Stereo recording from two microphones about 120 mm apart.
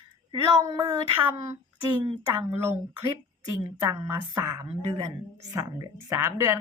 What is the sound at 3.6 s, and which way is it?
A woman's voice, 30° right (ahead or behind).